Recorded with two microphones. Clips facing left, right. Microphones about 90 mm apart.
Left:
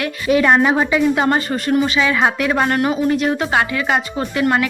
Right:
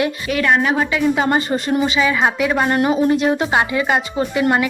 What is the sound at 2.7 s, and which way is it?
Speech, 20° right (ahead or behind).